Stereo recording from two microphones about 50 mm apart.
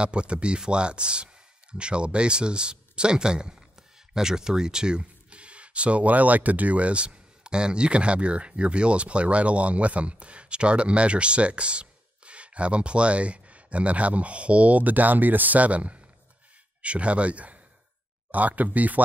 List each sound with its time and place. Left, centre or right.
0.0 s speech: right